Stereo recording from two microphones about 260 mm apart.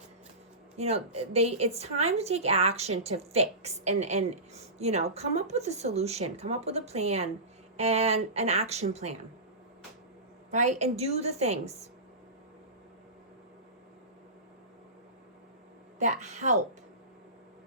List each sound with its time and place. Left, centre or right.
0.8 s speech: right
10.5 s speech: right
16.0 s speech: right